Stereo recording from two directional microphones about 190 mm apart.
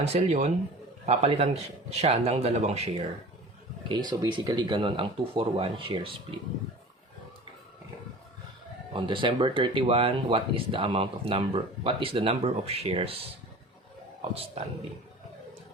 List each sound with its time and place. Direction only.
0.0 s speech: 35° right (ahead or behind)
3.8 s speech: 25° right (ahead or behind)
8.9 s speech: 25° right (ahead or behind)